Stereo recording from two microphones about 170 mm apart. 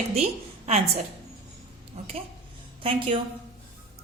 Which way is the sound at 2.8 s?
30° right (ahead or behind).